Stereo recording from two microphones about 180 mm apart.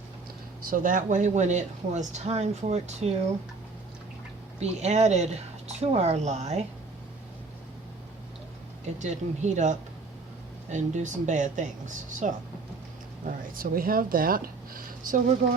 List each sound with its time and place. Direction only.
0.6 s speech: 50° right (ahead or behind)
4.6 s speech: 35° right (ahead or behind)
9.0 s speech: 40° right (ahead or behind)
13.2 s speech: 50° right (ahead or behind)